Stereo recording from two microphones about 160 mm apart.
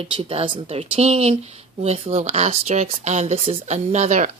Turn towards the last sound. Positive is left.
turn(degrees=-45)  # may be behind; listen again after turning